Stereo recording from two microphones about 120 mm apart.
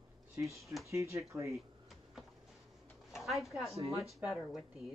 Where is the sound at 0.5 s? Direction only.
Centre (ahead or behind).